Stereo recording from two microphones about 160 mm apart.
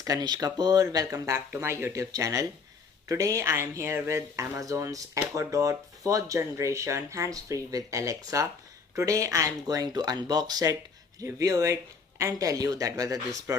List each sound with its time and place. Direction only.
0.0 s speech: 25° right (ahead or behind)